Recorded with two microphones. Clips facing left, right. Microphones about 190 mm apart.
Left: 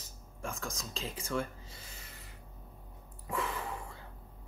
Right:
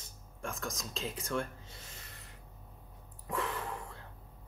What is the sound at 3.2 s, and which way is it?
Gasp, centre (ahead or behind).